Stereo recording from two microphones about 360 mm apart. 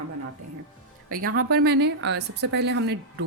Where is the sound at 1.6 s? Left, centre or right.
Right.